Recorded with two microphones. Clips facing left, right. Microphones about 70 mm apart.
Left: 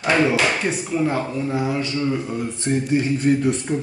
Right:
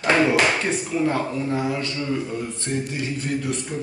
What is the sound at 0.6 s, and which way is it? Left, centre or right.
Speech, centre.